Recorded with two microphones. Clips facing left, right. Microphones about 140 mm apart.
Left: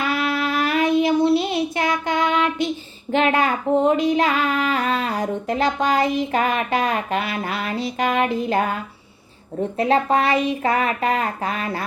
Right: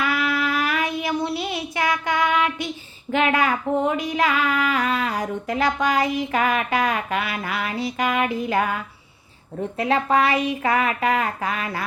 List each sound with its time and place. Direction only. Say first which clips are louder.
0.0 s child singing: left 1 dB; 30° left (ahead or behind)
3.1 s female singing: left 2 dB; 25° left (ahead or behind)